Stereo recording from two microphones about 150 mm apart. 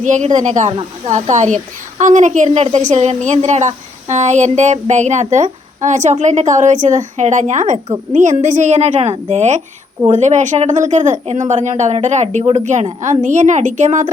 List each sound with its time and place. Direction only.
0.0 s a woman's voice: 55° right (ahead or behind)
2.5 s a woman's voice: 45° right (ahead or behind)